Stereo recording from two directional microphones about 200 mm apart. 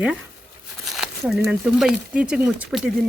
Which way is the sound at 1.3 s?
Centre (ahead or behind).